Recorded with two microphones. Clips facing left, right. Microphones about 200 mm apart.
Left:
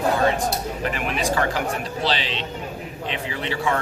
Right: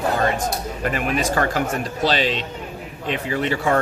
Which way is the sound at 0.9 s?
45° right (ahead or behind).